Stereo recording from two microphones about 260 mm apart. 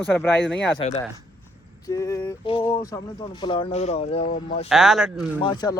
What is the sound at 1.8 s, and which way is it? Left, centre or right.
Speech, centre.